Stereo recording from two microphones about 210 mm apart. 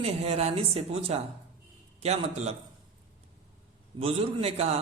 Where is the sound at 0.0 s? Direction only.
30° right (ahead or behind).